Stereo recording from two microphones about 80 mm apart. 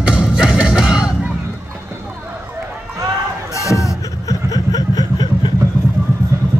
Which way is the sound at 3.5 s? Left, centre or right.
Left.